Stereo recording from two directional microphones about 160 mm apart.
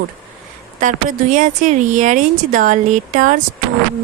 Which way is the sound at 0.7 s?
55° right (ahead or behind).